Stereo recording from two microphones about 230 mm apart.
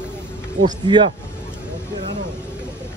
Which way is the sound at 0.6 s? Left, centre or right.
Centre.